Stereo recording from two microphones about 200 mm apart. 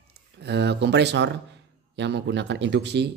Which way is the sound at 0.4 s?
55° right (ahead or behind).